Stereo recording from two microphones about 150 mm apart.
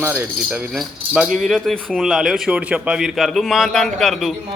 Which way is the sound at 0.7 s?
Centre (ahead or behind).